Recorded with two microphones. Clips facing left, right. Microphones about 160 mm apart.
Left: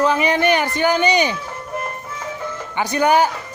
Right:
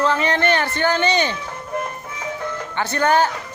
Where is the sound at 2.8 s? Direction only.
15° left (ahead or behind).